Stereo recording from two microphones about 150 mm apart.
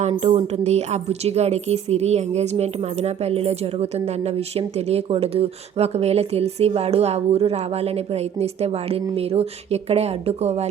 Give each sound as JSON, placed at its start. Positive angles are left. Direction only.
{"t": 0.0, "sound": "a woman's voice", "side_deg": -45}